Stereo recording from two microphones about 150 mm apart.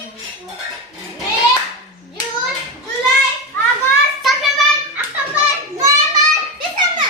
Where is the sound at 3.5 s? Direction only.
15° left (ahead or behind).